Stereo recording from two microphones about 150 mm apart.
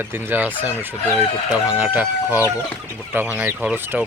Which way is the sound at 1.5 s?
10° right (ahead or behind).